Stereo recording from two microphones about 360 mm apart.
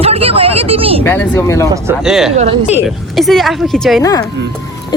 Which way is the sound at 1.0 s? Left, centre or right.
Centre.